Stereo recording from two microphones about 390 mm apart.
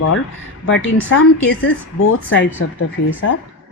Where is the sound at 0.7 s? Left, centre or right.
Left.